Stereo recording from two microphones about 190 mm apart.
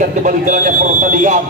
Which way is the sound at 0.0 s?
45° right (ahead or behind).